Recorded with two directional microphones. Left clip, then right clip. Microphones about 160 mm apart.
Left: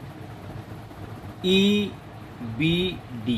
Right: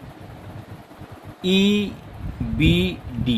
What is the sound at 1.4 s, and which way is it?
Speech, 55° right (ahead or behind).